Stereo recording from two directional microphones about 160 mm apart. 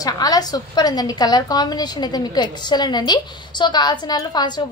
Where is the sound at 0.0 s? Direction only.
25° left (ahead or behind).